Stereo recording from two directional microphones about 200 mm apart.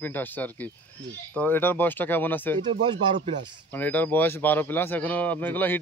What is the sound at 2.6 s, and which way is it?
Speech, 25° right (ahead or behind).